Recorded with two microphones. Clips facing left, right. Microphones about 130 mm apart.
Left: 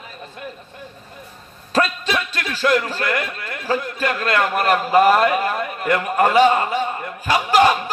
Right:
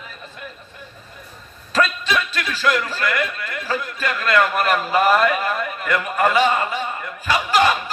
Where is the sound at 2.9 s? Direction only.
45° left (ahead or behind).